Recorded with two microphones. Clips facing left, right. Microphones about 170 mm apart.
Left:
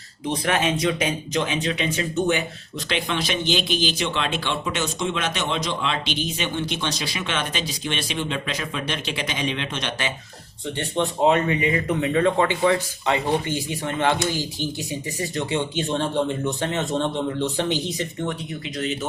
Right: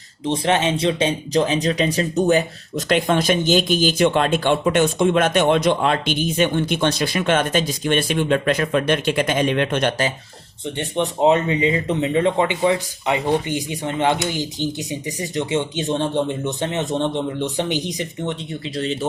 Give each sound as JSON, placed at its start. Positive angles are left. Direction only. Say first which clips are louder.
{"t": 0.3, "sound": "speech", "louder": "right 4 dB", "side_deg": -25}
{"t": 10.8, "sound": "speech", "louder": "right 2 dB", "side_deg": -20}